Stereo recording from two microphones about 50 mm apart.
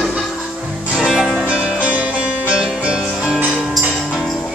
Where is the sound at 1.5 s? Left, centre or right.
Centre.